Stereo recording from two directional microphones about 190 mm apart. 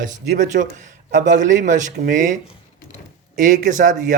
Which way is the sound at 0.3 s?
40° right (ahead or behind).